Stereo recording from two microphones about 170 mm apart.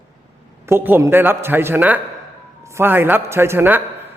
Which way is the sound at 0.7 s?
15° right (ahead or behind).